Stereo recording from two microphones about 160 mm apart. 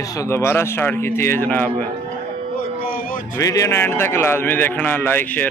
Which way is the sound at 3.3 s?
20° left (ahead or behind).